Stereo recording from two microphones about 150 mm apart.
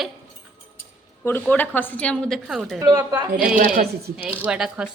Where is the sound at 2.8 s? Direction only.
25° right (ahead or behind).